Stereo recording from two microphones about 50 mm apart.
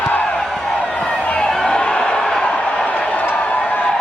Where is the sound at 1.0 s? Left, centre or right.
Left.